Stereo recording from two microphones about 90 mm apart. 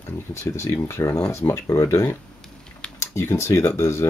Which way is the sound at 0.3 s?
30° left (ahead or behind).